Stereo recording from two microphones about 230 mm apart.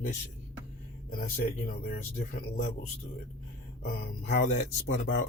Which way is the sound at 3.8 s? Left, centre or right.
Left.